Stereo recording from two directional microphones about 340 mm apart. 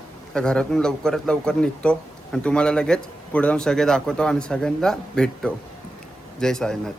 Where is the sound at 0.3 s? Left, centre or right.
Centre.